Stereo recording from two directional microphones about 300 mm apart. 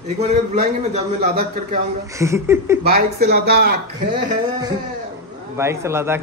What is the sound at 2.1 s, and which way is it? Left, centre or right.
Speech, centre.